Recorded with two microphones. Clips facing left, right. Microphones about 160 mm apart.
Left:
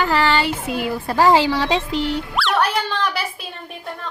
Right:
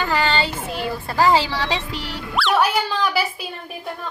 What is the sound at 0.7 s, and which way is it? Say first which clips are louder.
Speech: left 2 dB; 15° left (ahead or behind).